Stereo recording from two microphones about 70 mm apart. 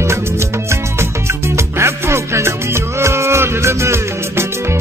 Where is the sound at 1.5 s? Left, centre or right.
Right.